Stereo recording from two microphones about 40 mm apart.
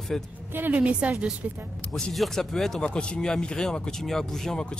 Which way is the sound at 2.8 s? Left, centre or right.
Left.